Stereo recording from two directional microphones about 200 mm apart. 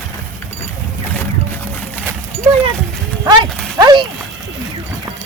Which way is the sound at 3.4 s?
5° left (ahead or behind).